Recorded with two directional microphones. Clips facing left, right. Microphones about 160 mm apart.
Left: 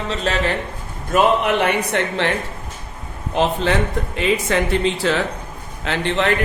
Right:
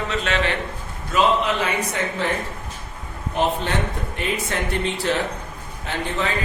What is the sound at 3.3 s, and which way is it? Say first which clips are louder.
A man's voice: left 4 dB; 90° left.